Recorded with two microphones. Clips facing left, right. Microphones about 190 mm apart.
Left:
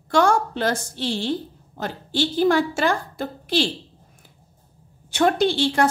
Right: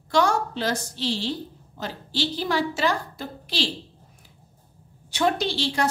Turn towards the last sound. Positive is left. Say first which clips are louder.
# left 6 dB
turn(degrees=50)  # may be behind; listen again after turning